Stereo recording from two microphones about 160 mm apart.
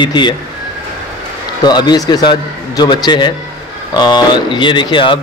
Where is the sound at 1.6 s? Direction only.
25° left (ahead or behind).